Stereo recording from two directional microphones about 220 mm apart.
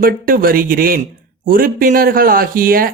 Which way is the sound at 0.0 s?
40° right (ahead or behind).